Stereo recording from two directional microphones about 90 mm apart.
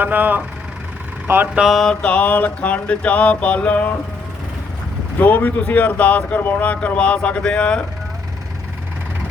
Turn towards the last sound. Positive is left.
turn(degrees=10)  # may be behind; listen again after turning